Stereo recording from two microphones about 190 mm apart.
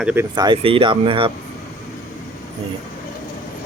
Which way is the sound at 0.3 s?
25° right (ahead or behind).